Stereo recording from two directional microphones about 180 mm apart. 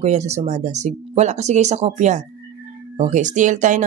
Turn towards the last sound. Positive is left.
turn(degrees=-45)  # may be behind; listen again after turning